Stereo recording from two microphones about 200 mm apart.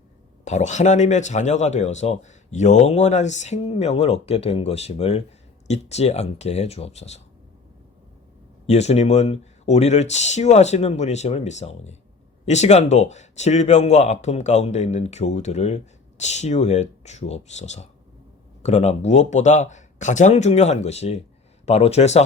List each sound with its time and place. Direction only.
0.4 s speech: 35° left (ahead or behind)
8.6 s speech: 35° left (ahead or behind)